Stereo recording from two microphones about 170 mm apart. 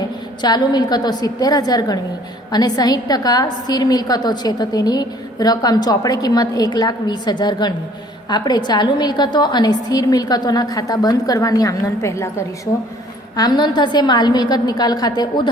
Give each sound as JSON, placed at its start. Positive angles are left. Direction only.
{"t": 0.4, "sound": "a woman's voice", "side_deg": 25}